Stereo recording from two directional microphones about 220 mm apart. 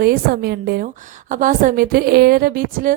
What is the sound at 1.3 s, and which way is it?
A woman's voice, 35° right (ahead or behind).